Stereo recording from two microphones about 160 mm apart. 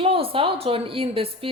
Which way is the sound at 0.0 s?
35° right (ahead or behind).